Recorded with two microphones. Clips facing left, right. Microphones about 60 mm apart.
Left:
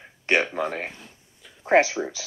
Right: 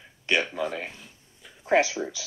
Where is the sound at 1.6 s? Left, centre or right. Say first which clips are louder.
Left 3 dB; left.